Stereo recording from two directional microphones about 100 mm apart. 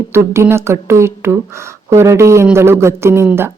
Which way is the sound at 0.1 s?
25° right (ahead or behind).